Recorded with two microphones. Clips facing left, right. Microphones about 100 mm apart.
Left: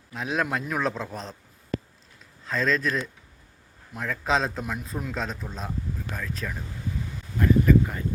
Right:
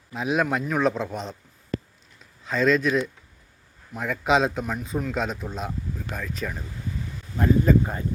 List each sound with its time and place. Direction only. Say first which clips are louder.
0.1 s a man's voice: right 4 dB; 5° right (ahead or behind)
2.4 s a man's voice: right 4 dB; 5° right (ahead or behind)
7.3 s speech: even; 25° right (ahead or behind)